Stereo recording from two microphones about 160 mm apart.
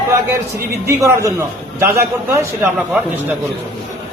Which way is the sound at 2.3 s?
15° right (ahead or behind).